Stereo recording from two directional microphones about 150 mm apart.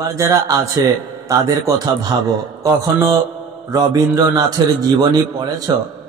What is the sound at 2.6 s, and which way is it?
A man's voice, 25° right (ahead or behind).